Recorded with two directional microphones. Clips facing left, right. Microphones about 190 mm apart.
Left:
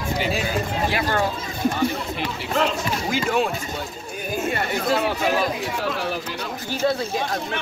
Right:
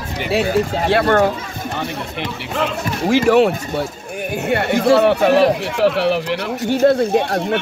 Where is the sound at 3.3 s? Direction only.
75° right (ahead or behind).